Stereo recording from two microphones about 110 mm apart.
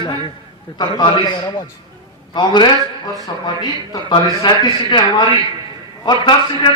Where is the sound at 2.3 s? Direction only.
40° left (ahead or behind).